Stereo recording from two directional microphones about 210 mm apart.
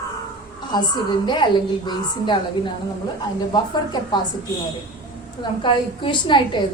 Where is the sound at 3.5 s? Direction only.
20° left (ahead or behind).